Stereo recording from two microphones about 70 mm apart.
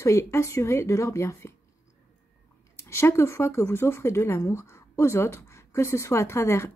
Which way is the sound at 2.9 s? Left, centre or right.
Left.